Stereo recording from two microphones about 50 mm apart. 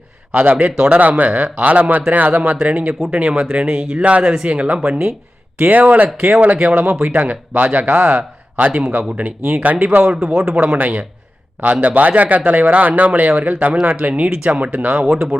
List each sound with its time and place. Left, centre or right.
0.3 s speech: right
2.3 s speech: centre
6.1 s speech: centre
7.0 s speech: right
14.6 s speech: right
15.0 s speech: centre